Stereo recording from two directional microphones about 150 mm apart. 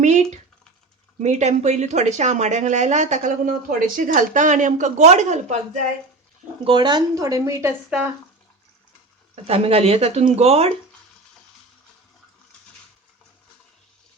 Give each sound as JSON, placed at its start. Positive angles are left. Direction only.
{"t": 0.0, "sound": "a sound", "side_deg": -50}
{"t": 1.2, "sound": "speech", "side_deg": -50}
{"t": 6.7, "sound": "speech", "side_deg": -30}
{"t": 9.3, "sound": "speech", "side_deg": -40}